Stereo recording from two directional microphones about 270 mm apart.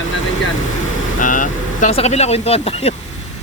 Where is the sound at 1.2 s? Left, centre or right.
Left.